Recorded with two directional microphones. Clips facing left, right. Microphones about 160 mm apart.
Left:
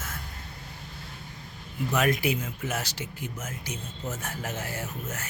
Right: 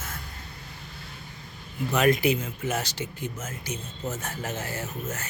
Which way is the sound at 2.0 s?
5° left (ahead or behind).